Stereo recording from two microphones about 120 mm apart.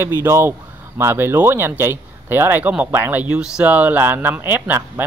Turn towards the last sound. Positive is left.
turn(degrees=-15)  # may be behind; listen again after turning